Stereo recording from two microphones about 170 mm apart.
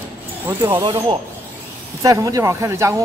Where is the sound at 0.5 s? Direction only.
10° right (ahead or behind).